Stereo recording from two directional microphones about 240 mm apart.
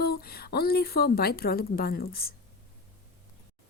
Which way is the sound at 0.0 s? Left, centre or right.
Left.